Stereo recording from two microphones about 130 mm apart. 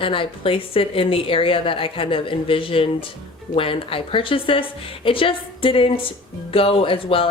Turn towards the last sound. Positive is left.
turn(degrees=45)  # may be behind; listen again after turning